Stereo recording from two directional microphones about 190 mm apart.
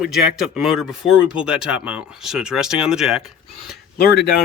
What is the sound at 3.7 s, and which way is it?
Speech, 55° left (ahead or behind).